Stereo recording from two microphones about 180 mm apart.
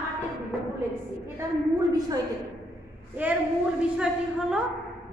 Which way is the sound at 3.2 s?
10° right (ahead or behind).